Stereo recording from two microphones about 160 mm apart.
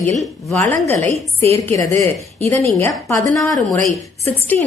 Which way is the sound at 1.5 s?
20° left (ahead or behind).